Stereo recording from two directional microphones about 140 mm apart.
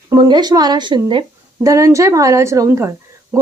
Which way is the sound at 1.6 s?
25° right (ahead or behind).